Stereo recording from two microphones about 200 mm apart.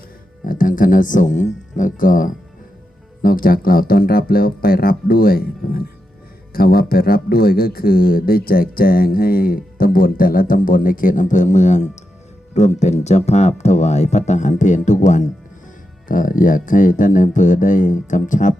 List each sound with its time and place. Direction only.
0.4 s speech: 45° left (ahead or behind)